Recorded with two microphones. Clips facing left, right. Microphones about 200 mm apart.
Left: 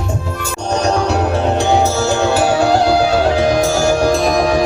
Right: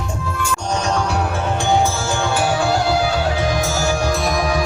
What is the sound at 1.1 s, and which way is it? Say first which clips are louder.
Music: left 6 dB; 40° left (ahead or behind).